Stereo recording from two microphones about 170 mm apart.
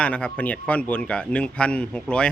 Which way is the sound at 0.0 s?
5° left (ahead or behind).